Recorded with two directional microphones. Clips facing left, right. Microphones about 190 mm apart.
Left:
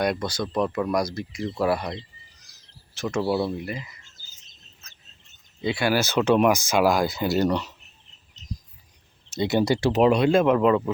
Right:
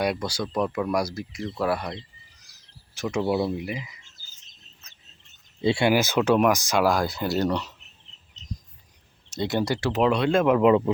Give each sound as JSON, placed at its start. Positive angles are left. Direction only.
{"t": 0.0, "sound": "speech", "side_deg": -5}
{"t": 2.5, "sound": "bird", "side_deg": -15}
{"t": 3.5, "sound": "speech", "side_deg": -15}
{"t": 5.6, "sound": "speech", "side_deg": -25}
{"t": 5.9, "sound": "speech", "side_deg": -15}
{"t": 6.1, "sound": "speech", "side_deg": -5}
{"t": 9.3, "sound": "speech", "side_deg": 5}
{"t": 9.6, "sound": "speech", "side_deg": 15}
{"t": 10.5, "sound": "speech", "side_deg": -15}